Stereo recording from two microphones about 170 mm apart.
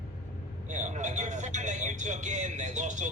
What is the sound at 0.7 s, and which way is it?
A man's voice, 45° right (ahead or behind).